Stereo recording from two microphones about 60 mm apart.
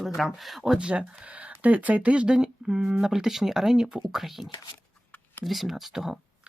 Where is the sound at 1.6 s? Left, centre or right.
Right.